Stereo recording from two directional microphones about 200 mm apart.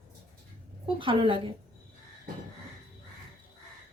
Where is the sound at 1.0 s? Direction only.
25° right (ahead or behind).